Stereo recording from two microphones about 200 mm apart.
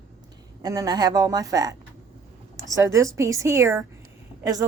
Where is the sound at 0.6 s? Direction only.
20° right (ahead or behind).